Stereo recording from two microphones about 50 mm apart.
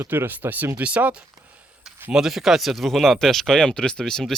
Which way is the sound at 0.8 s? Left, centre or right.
Right.